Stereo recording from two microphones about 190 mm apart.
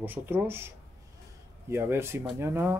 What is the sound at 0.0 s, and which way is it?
Speech, 10° right (ahead or behind).